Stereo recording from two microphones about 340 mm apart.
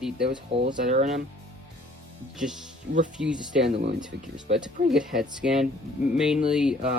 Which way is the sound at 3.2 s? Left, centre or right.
Right.